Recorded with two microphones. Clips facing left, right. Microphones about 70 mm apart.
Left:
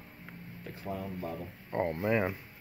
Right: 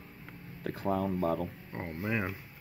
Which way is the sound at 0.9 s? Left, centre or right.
Right.